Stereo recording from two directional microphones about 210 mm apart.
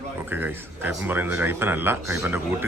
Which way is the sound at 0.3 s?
10° right (ahead or behind).